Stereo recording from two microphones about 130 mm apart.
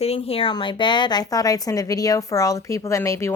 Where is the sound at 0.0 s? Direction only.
50° left (ahead or behind).